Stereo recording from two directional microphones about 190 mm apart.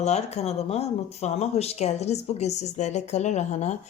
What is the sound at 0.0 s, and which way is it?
Speech, 35° left (ahead or behind).